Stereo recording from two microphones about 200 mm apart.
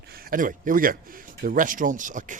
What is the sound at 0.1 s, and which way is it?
Speech, 45° right (ahead or behind).